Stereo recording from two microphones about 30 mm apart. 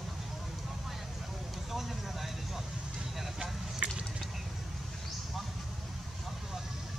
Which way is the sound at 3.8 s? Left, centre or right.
Right.